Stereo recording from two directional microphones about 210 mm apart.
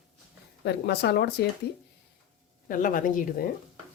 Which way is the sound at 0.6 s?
50° left (ahead or behind).